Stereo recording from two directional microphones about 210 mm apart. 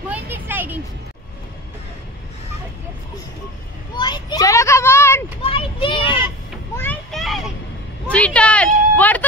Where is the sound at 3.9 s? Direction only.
20° left (ahead or behind).